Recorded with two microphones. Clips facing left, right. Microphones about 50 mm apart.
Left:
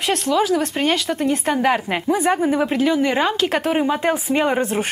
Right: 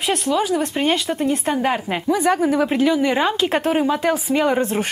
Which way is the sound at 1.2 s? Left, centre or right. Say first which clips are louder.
Left 1 dB; left.